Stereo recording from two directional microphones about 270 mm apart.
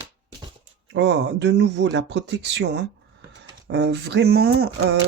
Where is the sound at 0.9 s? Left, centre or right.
Right.